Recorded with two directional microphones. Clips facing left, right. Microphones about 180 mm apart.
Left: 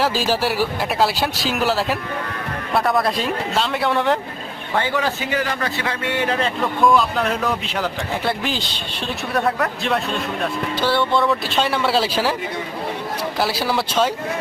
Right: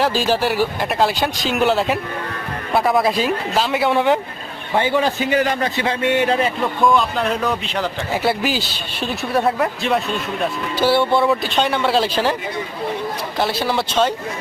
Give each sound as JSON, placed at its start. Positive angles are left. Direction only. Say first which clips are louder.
{"t": 0.0, "sound": "speech", "louder": "right 2 dB", "side_deg": 5}
{"t": 4.7, "sound": "a man's voice", "louder": "right 4 dB", "side_deg": -15}
{"t": 6.8, "sound": "speech", "louder": "even", "side_deg": 0}
{"t": 10.8, "sound": "music", "louder": "right 4 dB", "side_deg": -10}
{"t": 11.3, "sound": "speech", "louder": "right 2 dB", "side_deg": 0}
{"t": 13.4, "sound": "speech", "louder": "right 2 dB", "side_deg": 5}